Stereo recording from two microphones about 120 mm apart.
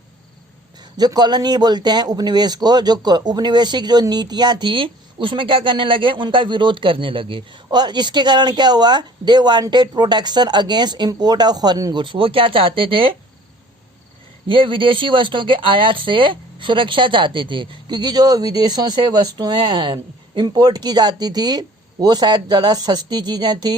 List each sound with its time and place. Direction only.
0.9 s speech: 35° right (ahead or behind)
14.4 s speech: 45° right (ahead or behind)